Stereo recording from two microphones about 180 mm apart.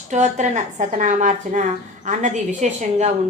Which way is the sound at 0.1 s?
40° right (ahead or behind).